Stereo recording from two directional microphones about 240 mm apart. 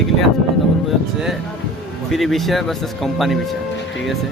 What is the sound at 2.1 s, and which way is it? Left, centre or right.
Speech, centre.